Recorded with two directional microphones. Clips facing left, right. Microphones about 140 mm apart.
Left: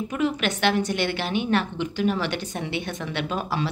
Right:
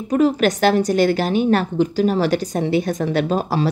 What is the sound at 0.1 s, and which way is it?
A woman's voice, 40° right (ahead or behind).